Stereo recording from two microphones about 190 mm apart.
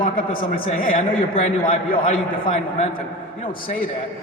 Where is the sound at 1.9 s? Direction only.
45° left (ahead or behind).